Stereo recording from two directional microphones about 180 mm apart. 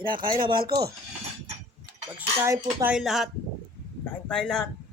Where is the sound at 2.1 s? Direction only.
10° right (ahead or behind).